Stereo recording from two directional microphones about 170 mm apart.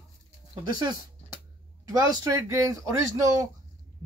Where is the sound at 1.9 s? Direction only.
20° right (ahead or behind).